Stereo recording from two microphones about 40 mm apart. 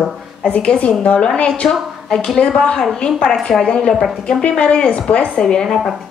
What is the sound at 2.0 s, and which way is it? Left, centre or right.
A woman's voice, centre.